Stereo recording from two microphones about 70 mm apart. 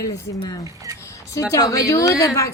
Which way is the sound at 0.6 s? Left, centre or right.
Right.